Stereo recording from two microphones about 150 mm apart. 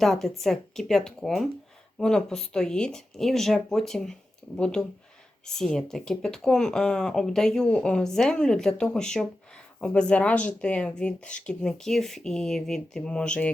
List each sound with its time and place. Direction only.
0.0 s speech: centre (ahead or behind)